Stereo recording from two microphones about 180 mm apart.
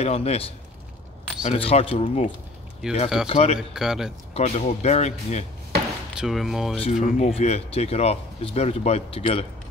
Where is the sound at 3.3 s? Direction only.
35° left (ahead or behind).